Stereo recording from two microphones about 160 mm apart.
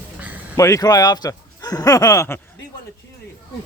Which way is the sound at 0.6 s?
20° left (ahead or behind).